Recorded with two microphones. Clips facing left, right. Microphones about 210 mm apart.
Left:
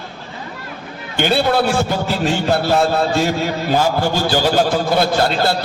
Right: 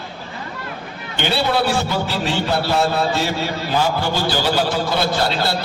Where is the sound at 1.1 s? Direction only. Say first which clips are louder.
Left 4 dB; 50° left (ahead or behind).